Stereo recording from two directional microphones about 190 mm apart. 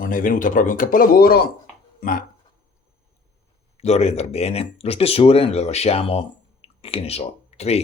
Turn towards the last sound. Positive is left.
turn(degrees=35)  # may be behind; listen again after turning